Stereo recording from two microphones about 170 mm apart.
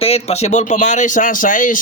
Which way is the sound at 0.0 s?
40° left (ahead or behind).